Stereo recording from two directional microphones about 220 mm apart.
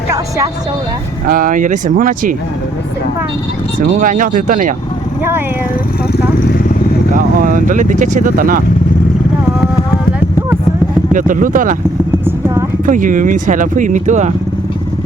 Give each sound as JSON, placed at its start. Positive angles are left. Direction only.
{"t": 1.3, "sound": "speech", "side_deg": -40}
{"t": 4.0, "sound": "speech", "side_deg": -40}
{"t": 7.1, "sound": "speech", "side_deg": -40}
{"t": 11.1, "sound": "speech", "side_deg": -35}
{"t": 12.8, "sound": "speech", "side_deg": -35}